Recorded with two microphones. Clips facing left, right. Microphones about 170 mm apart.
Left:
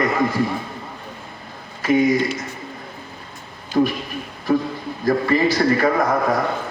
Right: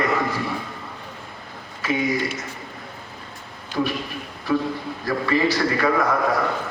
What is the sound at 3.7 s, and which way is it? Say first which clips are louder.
Speech: left 6 dB; 40° left (ahead or behind).